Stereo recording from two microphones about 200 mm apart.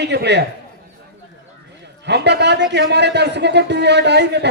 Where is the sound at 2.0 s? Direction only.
60° right (ahead or behind).